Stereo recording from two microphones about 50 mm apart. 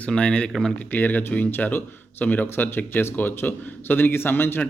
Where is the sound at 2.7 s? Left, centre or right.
Left.